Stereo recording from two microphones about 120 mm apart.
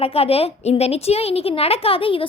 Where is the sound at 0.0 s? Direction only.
55° left (ahead or behind).